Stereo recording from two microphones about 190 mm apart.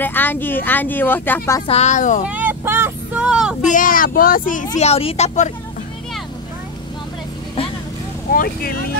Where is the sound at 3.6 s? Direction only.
45° left (ahead or behind).